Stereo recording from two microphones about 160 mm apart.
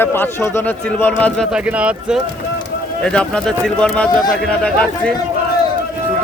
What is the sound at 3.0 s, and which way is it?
Speech, 5° left (ahead or behind).